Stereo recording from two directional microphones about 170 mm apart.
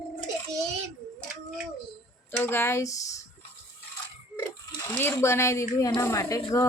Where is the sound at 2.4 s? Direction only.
15° left (ahead or behind).